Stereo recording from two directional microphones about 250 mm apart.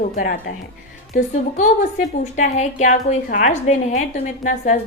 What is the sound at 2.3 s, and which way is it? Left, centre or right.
A woman's voice, left.